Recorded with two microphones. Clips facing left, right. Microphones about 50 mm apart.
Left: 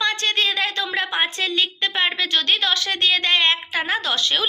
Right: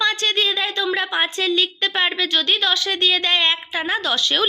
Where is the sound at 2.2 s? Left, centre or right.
Left.